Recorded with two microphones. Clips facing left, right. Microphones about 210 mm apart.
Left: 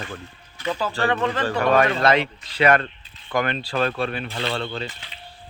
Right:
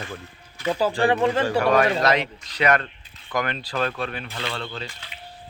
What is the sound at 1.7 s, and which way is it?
Speech, 30° left (ahead or behind).